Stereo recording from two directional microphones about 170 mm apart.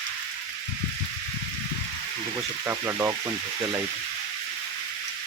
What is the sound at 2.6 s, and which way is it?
Speech, 15° right (ahead or behind).